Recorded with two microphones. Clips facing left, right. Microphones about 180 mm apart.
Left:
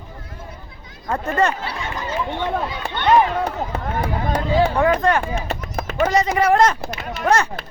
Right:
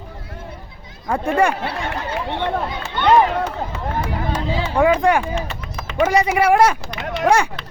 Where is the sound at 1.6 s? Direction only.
60° right (ahead or behind).